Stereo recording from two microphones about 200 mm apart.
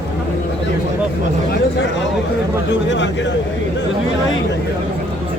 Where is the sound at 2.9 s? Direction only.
65° left (ahead or behind).